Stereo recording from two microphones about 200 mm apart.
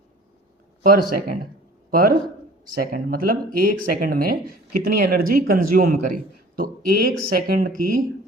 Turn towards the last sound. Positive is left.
turn(degrees=-45)  # may be behind; listen again after turning